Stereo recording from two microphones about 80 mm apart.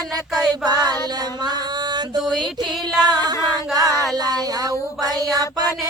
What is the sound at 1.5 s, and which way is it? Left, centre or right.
Music, right.